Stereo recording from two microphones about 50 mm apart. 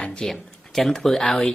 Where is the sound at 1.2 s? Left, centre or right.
Centre.